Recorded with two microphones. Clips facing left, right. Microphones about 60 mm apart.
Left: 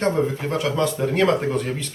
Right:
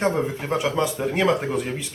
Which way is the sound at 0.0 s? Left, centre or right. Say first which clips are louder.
Left 2 dB; centre.